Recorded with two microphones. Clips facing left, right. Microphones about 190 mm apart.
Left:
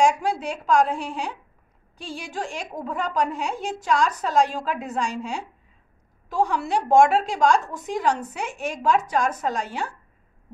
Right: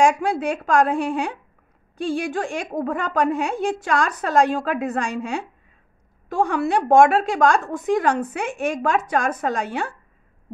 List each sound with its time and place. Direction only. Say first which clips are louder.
0.0 s a woman's voice: right 3 dB; 55° right (ahead or behind)